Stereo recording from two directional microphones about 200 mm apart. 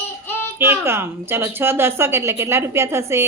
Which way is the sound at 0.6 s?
10° right (ahead or behind).